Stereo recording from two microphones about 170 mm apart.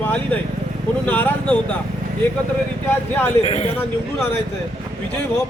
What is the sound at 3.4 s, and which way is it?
Speech, 35° left (ahead or behind).